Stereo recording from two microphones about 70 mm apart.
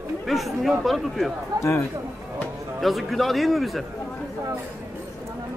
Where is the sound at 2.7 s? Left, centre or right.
Centre.